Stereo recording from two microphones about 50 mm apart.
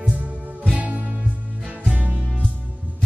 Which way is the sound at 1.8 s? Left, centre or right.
Right.